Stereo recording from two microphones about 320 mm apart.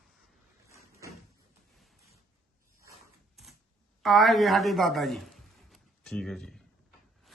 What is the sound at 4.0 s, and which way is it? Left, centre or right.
Speech, centre.